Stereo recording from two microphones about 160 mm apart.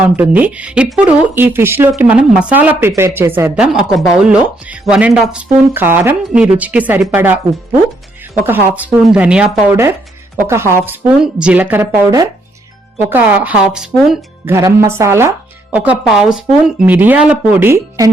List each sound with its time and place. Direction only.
0.0 s a woman's voice: 10° right (ahead or behind)
14.4 s a woman's voice: 20° right (ahead or behind)